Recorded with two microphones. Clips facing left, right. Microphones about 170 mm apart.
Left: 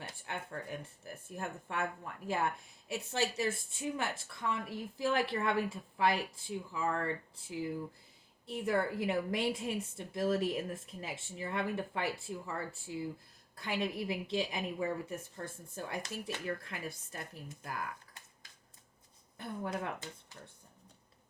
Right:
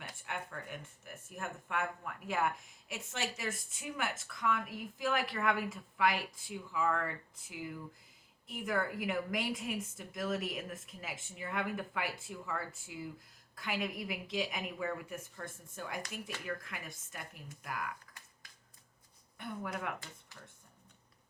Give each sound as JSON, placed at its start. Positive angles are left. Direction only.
{"t": 0.0, "sound": "a woman's voice", "side_deg": 35}
{"t": 19.4, "sound": "a woman's voice", "side_deg": 30}